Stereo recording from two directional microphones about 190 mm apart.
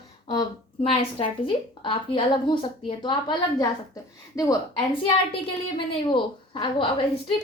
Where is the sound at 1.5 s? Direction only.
25° left (ahead or behind).